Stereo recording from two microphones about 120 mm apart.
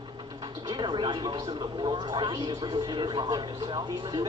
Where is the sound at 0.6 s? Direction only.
40° right (ahead or behind).